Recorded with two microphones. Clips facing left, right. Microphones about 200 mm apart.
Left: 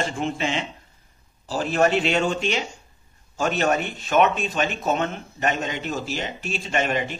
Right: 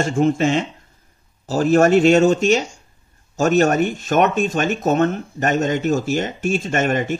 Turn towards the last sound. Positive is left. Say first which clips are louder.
# right 5 dB
turn(degrees=-45)  # may be behind; listen again after turning